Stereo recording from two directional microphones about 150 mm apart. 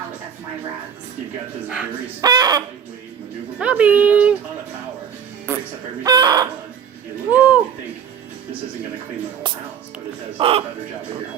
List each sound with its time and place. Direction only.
2.2 s speech: 25° right (ahead or behind)
3.6 s speech: 10° right (ahead or behind)
6.0 s speech: 25° right (ahead or behind)
7.3 s speech: 10° right (ahead or behind)
10.3 s speech: 40° right (ahead or behind)